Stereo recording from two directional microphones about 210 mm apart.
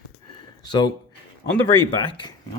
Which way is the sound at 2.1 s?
20° left (ahead or behind).